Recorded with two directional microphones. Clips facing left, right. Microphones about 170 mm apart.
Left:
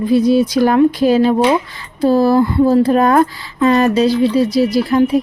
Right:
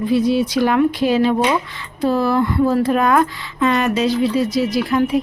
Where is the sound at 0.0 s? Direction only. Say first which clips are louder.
Left 4 dB; 40° left (ahead or behind).